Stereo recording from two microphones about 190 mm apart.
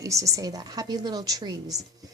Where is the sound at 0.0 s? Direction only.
15° right (ahead or behind).